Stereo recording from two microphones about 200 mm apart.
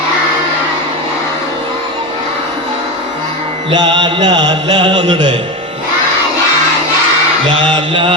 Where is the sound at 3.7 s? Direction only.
20° right (ahead or behind).